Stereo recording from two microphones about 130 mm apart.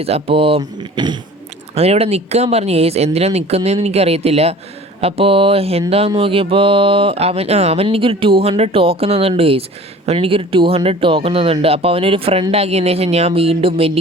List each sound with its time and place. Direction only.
0.0 s speech: 50° right (ahead or behind)
0.6 s speech: 35° right (ahead or behind)
1.7 s speech: 50° right (ahead or behind)